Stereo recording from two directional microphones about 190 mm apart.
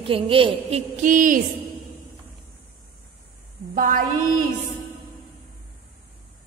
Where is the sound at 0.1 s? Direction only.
30° right (ahead or behind); by 1.4 s 45° right (ahead or behind).